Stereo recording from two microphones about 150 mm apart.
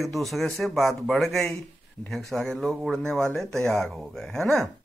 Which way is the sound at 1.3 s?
15° left (ahead or behind).